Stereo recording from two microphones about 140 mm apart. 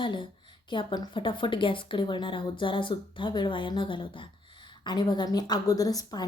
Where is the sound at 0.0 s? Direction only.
35° left (ahead or behind).